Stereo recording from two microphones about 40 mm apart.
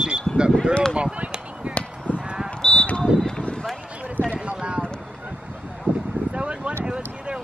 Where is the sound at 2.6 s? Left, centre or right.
Centre.